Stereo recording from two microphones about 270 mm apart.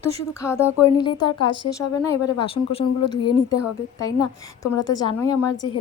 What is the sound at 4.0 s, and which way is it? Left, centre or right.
A woman's voice, centre.